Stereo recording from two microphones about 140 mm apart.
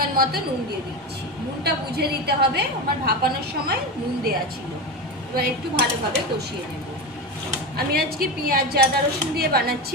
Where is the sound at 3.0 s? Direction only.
90° right.